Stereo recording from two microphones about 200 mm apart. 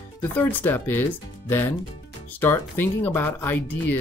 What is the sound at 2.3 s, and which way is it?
Speech, 10° left (ahead or behind).